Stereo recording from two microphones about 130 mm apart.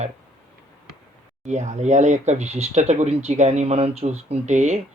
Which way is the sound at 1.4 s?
65° right (ahead or behind).